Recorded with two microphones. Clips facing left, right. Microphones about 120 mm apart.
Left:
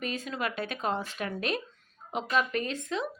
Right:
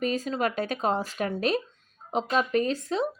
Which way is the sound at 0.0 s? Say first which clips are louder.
Right 6 dB; 40° right (ahead or behind).